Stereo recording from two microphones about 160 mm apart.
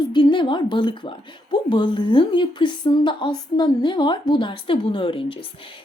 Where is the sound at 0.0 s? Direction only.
30° left (ahead or behind).